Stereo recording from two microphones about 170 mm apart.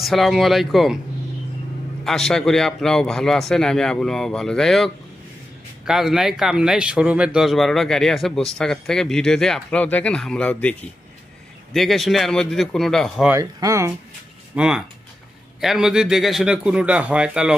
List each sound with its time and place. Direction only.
0.0 s speech: centre (ahead or behind)
2.0 s speech: centre (ahead or behind)
13.3 s speech: 20° right (ahead or behind)
14.5 s speech: 5° right (ahead or behind)